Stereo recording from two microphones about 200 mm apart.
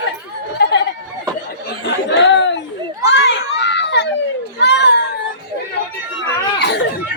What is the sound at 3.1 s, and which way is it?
Children playing, 60° left (ahead or behind).